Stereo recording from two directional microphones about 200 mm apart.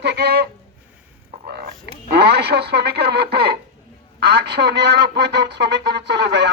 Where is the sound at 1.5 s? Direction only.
50° right (ahead or behind).